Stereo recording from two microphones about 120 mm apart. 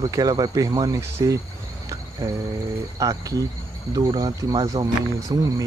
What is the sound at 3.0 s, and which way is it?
Speech, 30° right (ahead or behind).